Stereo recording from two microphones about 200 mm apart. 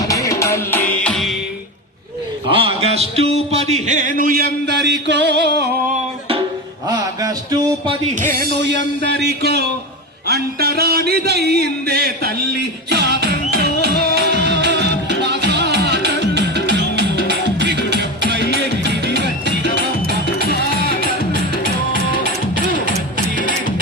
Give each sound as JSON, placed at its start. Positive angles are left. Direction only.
{"t": 0.0, "sound": "music", "side_deg": 15}
{"t": 2.5, "sound": "a sound", "side_deg": -25}
{"t": 6.8, "sound": "a sound", "side_deg": -20}
{"t": 9.0, "sound": "speech", "side_deg": -55}
{"t": 10.2, "sound": "music", "side_deg": -50}
{"t": 20.1, "sound": "music", "side_deg": 50}